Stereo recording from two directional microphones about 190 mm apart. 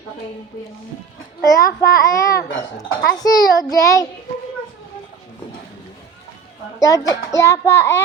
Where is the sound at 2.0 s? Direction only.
15° left (ahead or behind).